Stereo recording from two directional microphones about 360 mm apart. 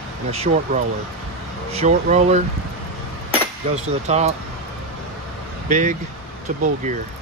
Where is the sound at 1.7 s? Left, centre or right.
Centre.